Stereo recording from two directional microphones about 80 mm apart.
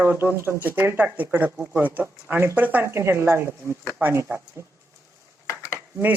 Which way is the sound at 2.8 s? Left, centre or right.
Right.